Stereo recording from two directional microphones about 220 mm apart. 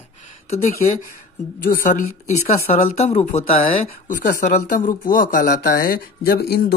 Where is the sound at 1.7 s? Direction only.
35° left (ahead or behind).